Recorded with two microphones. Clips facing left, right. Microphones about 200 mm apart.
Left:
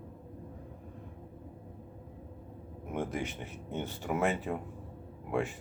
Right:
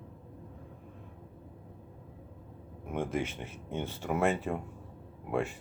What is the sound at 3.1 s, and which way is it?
Speech, 15° left (ahead or behind).